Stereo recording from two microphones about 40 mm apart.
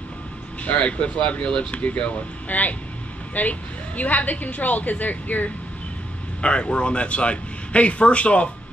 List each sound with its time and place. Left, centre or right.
0.7 s a man's voice: left
6.4 s a man's voice: left